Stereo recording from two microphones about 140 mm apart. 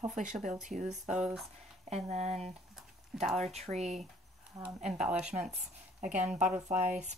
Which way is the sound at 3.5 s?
50° right (ahead or behind).